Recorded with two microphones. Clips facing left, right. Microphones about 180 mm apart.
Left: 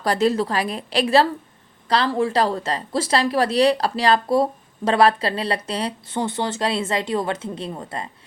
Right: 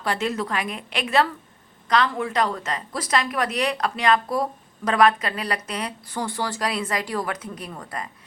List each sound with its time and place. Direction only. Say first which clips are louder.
0.0 s a woman's voice: left 6 dB; 35° left (ahead or behind)